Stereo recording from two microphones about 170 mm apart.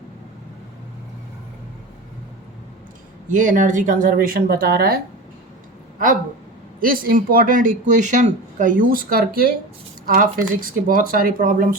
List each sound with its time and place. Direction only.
3.2 s speech: 50° right (ahead or behind)
6.7 s speech: 55° right (ahead or behind)